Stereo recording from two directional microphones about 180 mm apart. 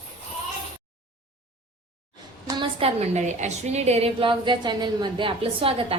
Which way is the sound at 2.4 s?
30° right (ahead or behind).